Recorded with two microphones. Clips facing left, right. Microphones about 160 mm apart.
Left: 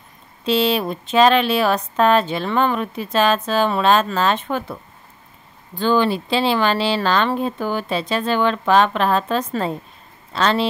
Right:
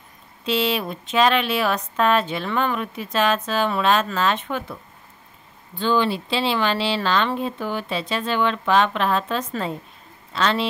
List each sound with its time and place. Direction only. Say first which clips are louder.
0.5 s speech: left 4 dB; 35° left (ahead or behind)
5.8 s speech: left 3 dB; 45° left (ahead or behind)